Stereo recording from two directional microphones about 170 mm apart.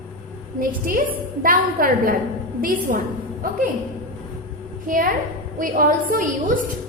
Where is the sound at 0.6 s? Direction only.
55° right (ahead or behind).